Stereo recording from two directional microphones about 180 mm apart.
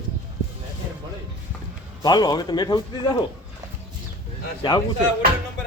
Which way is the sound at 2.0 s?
20° left (ahead or behind).